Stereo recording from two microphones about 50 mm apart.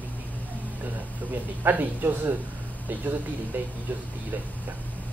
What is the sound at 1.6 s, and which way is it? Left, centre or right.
Speech, right.